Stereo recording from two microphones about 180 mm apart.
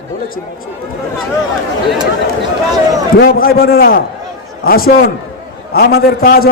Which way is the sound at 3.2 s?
55° left (ahead or behind).